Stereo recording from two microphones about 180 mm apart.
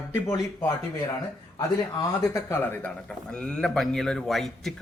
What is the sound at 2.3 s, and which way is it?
A man's voice, 10° left (ahead or behind).